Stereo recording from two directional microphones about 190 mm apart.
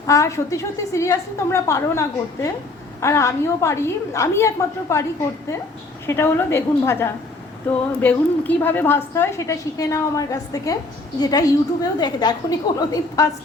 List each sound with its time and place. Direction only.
0.1 s a woman's voice: 15° left (ahead or behind)
6.1 s a woman's voice: 10° left (ahead or behind)